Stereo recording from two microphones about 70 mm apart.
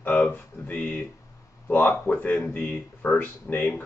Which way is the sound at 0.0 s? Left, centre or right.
Left.